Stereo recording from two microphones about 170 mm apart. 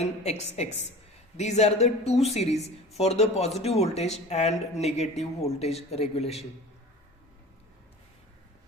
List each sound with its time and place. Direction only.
0.0 s a woman's voice: 40° left (ahead or behind)